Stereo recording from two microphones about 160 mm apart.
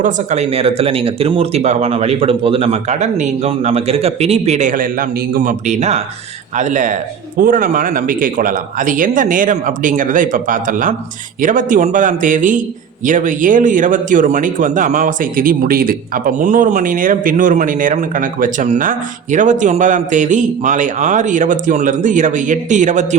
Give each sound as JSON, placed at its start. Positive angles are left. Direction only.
{"t": 0.0, "sound": "speech", "side_deg": -45}